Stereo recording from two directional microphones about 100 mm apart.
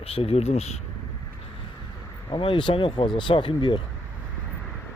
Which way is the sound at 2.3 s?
55° left (ahead or behind).